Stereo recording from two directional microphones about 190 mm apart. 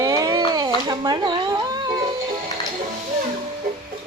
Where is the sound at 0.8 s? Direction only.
20° right (ahead or behind).